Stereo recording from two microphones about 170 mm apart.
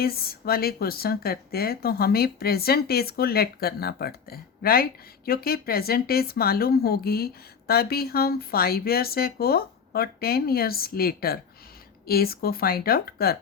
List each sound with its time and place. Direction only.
0.0 s speech: 60° left (ahead or behind)